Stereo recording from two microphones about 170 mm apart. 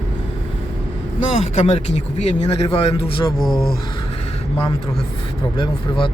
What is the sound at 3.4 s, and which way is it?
Speech, centre (ahead or behind).